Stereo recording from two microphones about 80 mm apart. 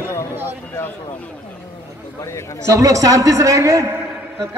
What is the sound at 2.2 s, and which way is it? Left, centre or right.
Speech, left.